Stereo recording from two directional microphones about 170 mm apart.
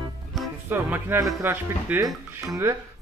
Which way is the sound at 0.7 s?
15° right (ahead or behind).